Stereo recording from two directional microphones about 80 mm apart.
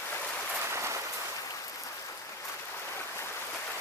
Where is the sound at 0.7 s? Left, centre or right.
Right.